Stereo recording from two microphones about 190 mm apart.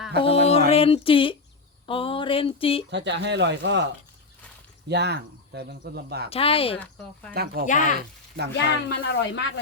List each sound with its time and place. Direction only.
0.2 s music: 30° left (ahead or behind)
0.7 s speech: 30° left (ahead or behind)
2.9 s speech: 70° right (ahead or behind)
4.9 s speech: 60° right (ahead or behind)
6.3 s speech: 30° left (ahead or behind)
6.7 s speech: 10° left (ahead or behind)
7.6 s speech: 55° right (ahead or behind)
8.5 s speech: 65° left (ahead or behind)